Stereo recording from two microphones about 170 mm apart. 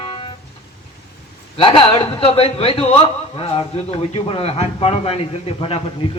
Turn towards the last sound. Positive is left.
turn(degrees=35)  # may be behind; listen again after turning